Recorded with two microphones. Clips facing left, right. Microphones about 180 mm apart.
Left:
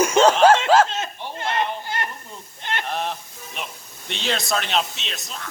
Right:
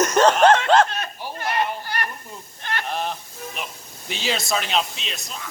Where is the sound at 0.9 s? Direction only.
20° left (ahead or behind).